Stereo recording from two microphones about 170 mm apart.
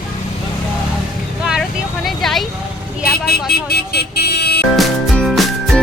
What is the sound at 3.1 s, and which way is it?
Speech, 65° left (ahead or behind).